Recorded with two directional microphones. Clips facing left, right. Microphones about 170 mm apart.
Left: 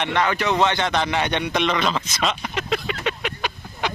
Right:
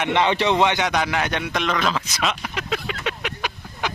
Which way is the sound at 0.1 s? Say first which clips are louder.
Right 4 dB; 20° right (ahead or behind).